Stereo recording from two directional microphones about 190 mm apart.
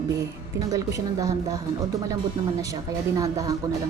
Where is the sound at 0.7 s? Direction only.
15° right (ahead or behind).